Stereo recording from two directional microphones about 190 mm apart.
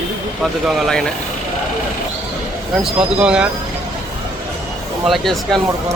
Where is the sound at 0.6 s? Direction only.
Centre (ahead or behind).